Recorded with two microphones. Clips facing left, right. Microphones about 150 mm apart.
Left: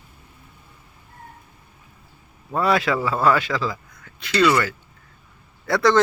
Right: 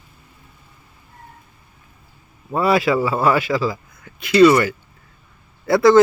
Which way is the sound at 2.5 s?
5° right (ahead or behind).